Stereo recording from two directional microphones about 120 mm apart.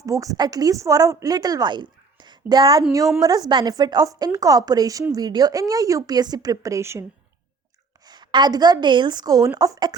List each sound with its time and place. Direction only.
0.0 s a woman's voice: 30° right (ahead or behind)
8.0 s a woman's voice: 35° right (ahead or behind)